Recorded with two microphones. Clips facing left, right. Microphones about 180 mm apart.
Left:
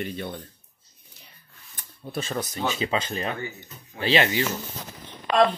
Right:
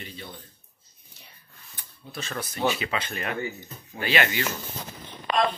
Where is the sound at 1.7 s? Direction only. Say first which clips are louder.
Left 8 dB; 35° left (ahead or behind).